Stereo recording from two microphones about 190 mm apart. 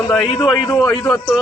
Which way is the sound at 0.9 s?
20° left (ahead or behind).